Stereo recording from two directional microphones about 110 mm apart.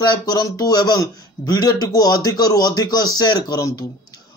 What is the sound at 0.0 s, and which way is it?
Speech, 40° left (ahead or behind).